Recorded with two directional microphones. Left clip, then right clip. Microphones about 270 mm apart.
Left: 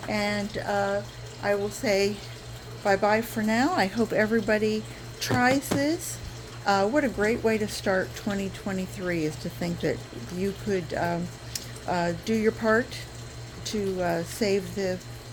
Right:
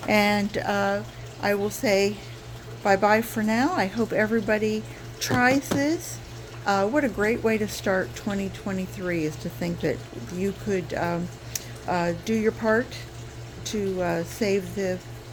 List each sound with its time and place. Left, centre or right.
0.1 s speech: right
1.8 s speech: centre